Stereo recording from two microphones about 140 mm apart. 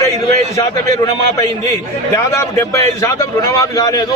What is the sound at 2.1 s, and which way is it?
A man's voice, 20° left (ahead or behind).